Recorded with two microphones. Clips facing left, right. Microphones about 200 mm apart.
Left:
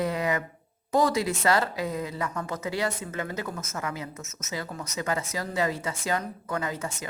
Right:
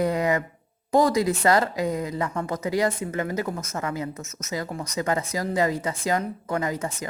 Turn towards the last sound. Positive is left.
turn(degrees=-35)  # may be behind; listen again after turning